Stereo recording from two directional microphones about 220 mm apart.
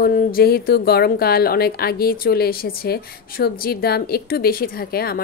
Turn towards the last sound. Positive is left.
turn(degrees=45)  # may be behind; listen again after turning